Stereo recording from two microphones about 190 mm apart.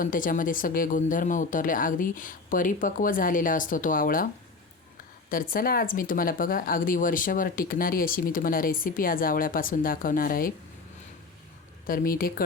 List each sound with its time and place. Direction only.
0.0 s speech: 45° left (ahead or behind)
5.3 s speech: 50° left (ahead or behind)
11.9 s speech: 50° left (ahead or behind)